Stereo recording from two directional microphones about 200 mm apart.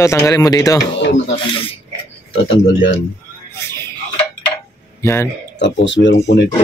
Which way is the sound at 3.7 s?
10° left (ahead or behind).